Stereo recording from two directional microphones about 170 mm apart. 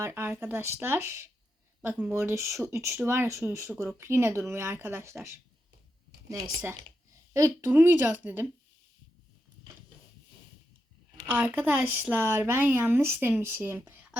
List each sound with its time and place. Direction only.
0.0 s speech: 15° right (ahead or behind)
7.3 s speech: 15° right (ahead or behind)
11.3 s speech: 10° right (ahead or behind)